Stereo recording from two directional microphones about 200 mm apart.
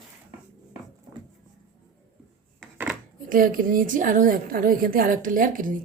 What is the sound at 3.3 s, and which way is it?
A woman's voice, 45° right (ahead or behind).